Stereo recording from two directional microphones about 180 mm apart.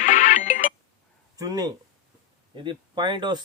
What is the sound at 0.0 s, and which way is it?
Music, 45° left (ahead or behind).